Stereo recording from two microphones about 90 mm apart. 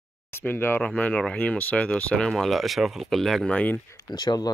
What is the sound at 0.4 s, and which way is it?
Speech, 25° left (ahead or behind).